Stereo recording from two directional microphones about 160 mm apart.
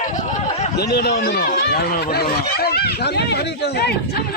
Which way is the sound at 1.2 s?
70° left (ahead or behind).